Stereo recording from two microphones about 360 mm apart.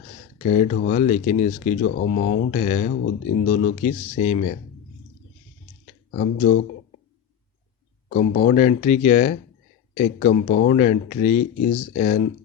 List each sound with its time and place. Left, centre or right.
0.4 s speech: left
6.1 s speech: left
8.1 s speech: left